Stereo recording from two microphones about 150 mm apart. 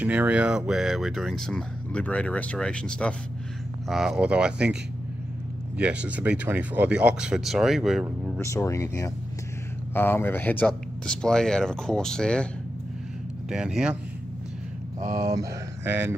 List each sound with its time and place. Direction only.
0.0 s speech: 10° right (ahead or behind)
5.8 s speech: 10° right (ahead or behind)
8.4 s speech: 20° left (ahead or behind)
13.5 s speech: 5° right (ahead or behind)
15.0 s speech: 70° right (ahead or behind)
15.3 s speech: 15° right (ahead or behind)